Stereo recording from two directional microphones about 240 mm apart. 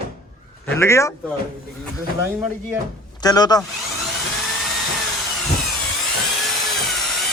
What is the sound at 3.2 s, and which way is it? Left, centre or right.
Speech, centre.